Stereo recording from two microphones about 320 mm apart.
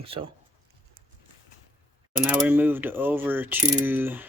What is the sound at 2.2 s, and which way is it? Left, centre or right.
Speech, centre.